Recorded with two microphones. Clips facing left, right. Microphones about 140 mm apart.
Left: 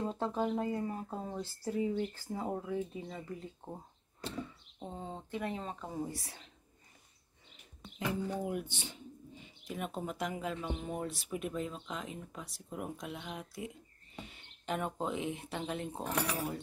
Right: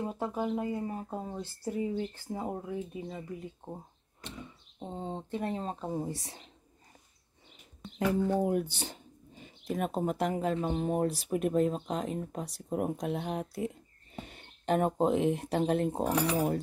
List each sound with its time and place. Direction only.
0.0 s speech: 10° right (ahead or behind)
4.8 s speech: 25° right (ahead or behind)
5.9 s speech: 25° right (ahead or behind)
7.8 s a sound: centre (ahead or behind)
8.3 s speech: 40° right (ahead or behind)
11.4 s speech: 50° right (ahead or behind)